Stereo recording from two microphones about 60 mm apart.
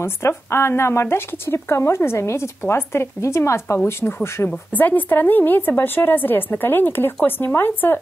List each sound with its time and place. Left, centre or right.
0.0 s speech: left
4.5 s speech: left